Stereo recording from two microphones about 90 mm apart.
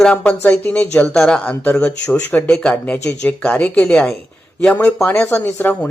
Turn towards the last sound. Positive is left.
turn(degrees=20)  # may be behind; listen again after turning